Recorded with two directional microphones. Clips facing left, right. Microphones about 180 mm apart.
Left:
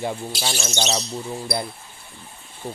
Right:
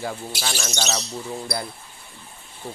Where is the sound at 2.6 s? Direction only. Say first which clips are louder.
Left 3 dB; 15° left (ahead or behind).